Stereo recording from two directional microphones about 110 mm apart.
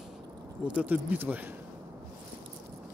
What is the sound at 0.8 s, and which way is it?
Speech, 15° right (ahead or behind).